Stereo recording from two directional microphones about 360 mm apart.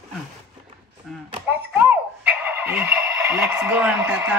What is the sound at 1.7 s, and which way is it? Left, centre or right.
Radio, centre.